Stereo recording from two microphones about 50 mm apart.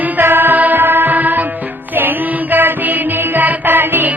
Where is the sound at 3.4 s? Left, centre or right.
Right.